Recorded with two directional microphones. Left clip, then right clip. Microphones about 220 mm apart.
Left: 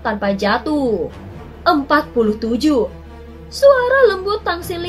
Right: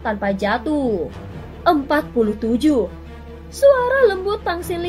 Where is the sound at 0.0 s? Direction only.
35° right (ahead or behind).